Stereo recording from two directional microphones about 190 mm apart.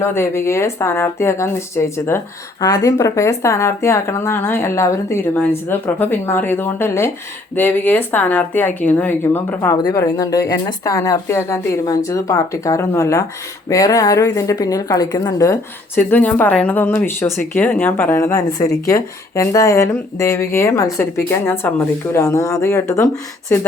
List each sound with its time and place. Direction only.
0.0 s speech: 15° left (ahead or behind)
16.0 s speech: 10° left (ahead or behind)